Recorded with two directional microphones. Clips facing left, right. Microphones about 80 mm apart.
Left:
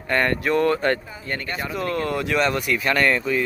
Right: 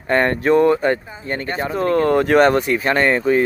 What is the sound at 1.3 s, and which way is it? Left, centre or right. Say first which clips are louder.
Speech: right 5 dB; right.